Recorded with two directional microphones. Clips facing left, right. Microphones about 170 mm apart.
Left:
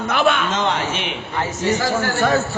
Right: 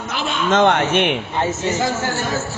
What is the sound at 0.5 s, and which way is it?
Speech, 60° right (ahead or behind).